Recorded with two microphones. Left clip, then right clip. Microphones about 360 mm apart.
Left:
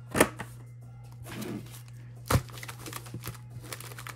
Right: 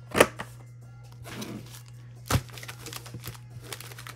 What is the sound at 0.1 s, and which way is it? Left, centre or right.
Chopping, right.